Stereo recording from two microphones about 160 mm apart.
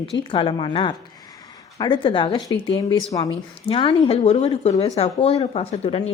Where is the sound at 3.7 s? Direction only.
35° left (ahead or behind).